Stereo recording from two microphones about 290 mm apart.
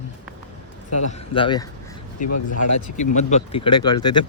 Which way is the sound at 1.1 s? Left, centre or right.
Centre.